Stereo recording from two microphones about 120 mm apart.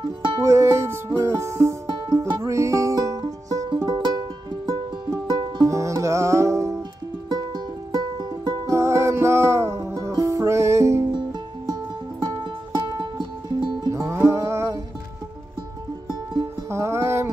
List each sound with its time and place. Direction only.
0.4 s music: 25° right (ahead or behind)
2.0 s music: 40° right (ahead or behind)
2.4 s music: 25° right (ahead or behind)
5.7 s music: 25° right (ahead or behind)
8.6 s music: 25° right (ahead or behind)
12.7 s music: 40° right (ahead or behind)
14.1 s music: 25° right (ahead or behind)
16.7 s music: 25° right (ahead or behind)